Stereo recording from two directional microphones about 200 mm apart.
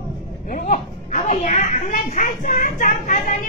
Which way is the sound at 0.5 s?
40° left (ahead or behind).